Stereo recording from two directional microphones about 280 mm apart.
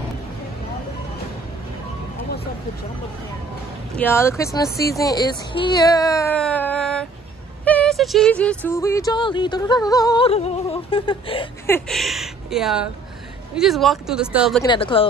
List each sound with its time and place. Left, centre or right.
3.9 s music: centre
4.8 s speech: centre
7.6 s music: centre
11.7 s speech: centre
14.6 s music: centre